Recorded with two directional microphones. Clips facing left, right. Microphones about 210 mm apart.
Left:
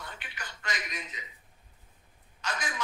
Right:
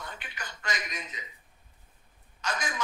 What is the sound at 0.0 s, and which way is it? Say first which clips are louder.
Telephone: right 2 dB; 45° right (ahead or behind).